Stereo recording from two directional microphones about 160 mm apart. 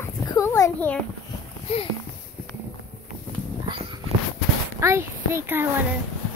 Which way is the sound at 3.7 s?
30° right (ahead or behind).